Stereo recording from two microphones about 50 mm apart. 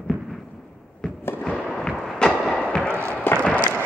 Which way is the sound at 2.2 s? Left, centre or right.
Centre.